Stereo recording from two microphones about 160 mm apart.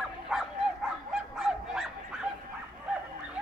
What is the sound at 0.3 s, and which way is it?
Bow-wow, centre (ahead or behind).